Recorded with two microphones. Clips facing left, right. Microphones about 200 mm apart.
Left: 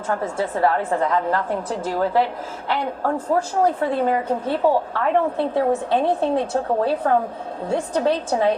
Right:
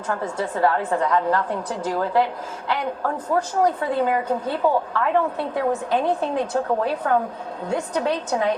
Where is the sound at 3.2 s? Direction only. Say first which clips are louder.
Even; 25° left (ahead or behind).